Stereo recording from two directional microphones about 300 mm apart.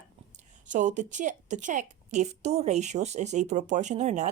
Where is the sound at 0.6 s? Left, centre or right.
Right.